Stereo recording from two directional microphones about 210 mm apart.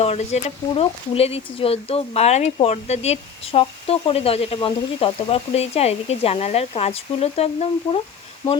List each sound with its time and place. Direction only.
0.0 s speech: 30° left (ahead or behind)